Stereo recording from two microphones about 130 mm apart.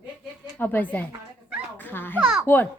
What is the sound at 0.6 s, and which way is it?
A woman's voice, 15° left (ahead or behind).